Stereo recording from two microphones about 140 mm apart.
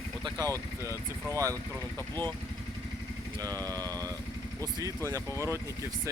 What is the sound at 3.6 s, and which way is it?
Speech, 25° right (ahead or behind).